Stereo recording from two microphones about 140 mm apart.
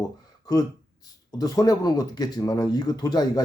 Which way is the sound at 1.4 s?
25° left (ahead or behind).